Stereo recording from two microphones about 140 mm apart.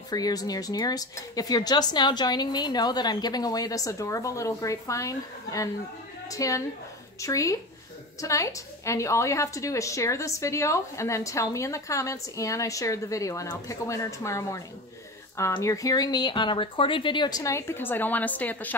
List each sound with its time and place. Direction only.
0.1 s a woman's voice: 25° left (ahead or behind)
15.6 s a woman's voice: 25° left (ahead or behind)